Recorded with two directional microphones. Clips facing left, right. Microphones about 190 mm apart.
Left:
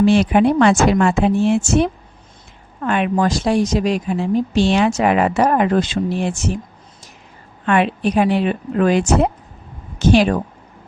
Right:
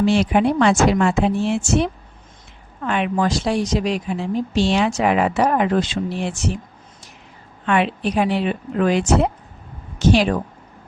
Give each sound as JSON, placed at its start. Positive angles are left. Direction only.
{"t": 0.0, "sound": "a woman's voice", "side_deg": 55}
{"t": 7.6, "sound": "a woman's voice", "side_deg": 50}